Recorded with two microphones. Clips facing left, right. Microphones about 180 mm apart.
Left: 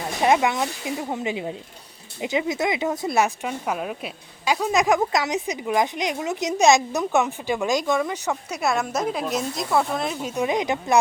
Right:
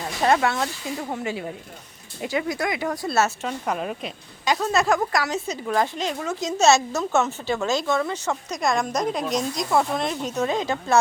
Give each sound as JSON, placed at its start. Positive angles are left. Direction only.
{"t": 0.2, "sound": "speech", "side_deg": 15}